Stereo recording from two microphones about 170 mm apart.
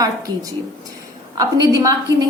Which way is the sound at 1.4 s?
20° right (ahead or behind).